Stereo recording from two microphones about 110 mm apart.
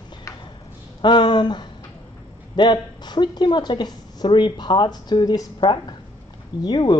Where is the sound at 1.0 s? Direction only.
45° left (ahead or behind).